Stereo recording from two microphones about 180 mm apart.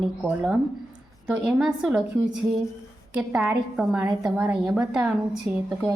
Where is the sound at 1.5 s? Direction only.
5° right (ahead or behind).